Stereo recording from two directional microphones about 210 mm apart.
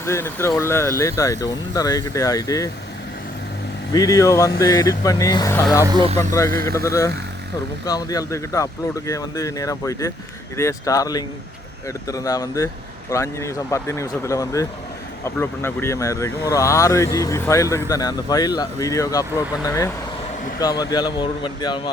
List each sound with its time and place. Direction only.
0.0 s speech: 10° left (ahead or behind)
3.9 s speech: 15° left (ahead or behind)
5.8 s speech: 20° right (ahead or behind)
6.1 s speech: 15° left (ahead or behind)